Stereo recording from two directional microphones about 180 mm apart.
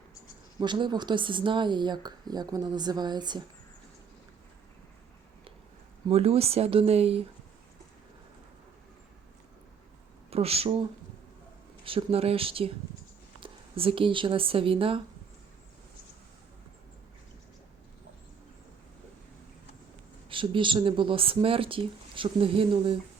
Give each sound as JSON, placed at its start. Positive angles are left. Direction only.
{"t": 0.6, "sound": "speech", "side_deg": -25}
{"t": 6.1, "sound": "speech", "side_deg": -35}
{"t": 10.2, "sound": "speech", "side_deg": -35}
{"t": 11.9, "sound": "speech", "side_deg": -30}
{"t": 20.3, "sound": "speech", "side_deg": -30}